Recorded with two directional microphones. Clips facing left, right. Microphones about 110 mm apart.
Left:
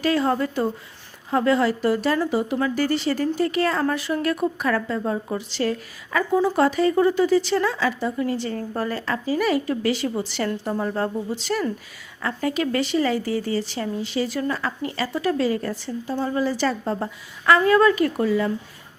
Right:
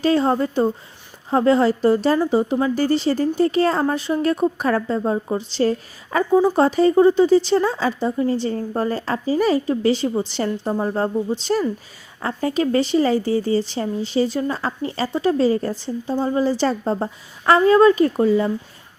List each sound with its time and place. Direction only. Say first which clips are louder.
0.0 s a woman's voice: right 3 dB; 30° right (ahead or behind)